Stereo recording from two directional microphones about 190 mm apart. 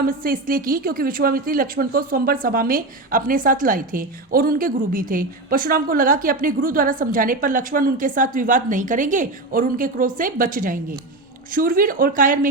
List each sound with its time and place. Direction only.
0.0 s a woman's voice: 50° right (ahead or behind)